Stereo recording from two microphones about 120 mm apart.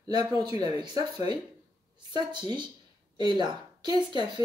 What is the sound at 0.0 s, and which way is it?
Speech, 35° right (ahead or behind).